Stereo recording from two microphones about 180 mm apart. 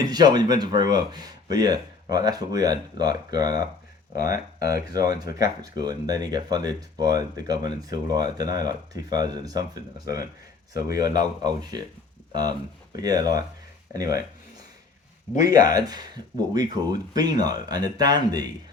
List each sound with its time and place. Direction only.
0.0 s speech: 20° right (ahead or behind)
15.4 s speech: 20° right (ahead or behind)